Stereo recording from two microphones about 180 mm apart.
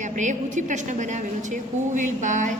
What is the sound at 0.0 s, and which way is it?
A woman's voice, 45° right (ahead or behind).